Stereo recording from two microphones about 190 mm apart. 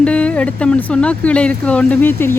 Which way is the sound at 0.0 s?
5° left (ahead or behind).